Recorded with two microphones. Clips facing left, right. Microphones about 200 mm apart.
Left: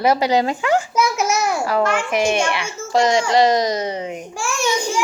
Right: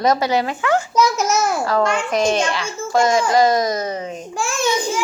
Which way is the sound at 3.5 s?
15° left (ahead or behind).